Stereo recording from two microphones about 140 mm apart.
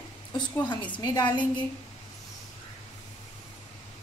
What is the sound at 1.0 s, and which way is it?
Speech, 30° left (ahead or behind).